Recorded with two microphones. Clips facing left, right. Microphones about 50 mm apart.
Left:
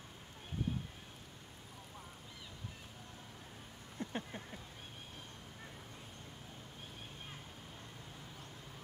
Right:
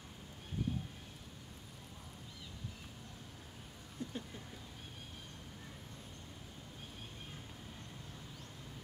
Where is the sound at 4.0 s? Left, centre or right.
Left.